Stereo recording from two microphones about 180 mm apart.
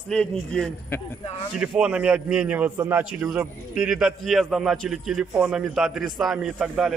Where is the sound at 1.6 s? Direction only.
5° right (ahead or behind).